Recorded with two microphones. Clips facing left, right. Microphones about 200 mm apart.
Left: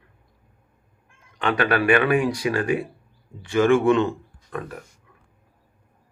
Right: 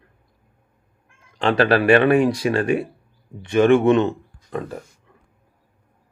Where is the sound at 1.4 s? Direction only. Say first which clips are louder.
Right 4 dB; 30° right (ahead or behind).